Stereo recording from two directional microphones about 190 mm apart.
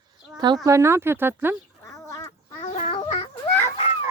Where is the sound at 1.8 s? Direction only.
15° left (ahead or behind).